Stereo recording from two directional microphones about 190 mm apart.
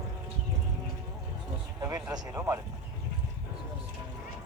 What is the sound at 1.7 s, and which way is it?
Speech, 15° right (ahead or behind).